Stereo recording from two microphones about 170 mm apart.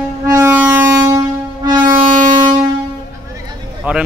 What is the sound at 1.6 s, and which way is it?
Music, 25° right (ahead or behind).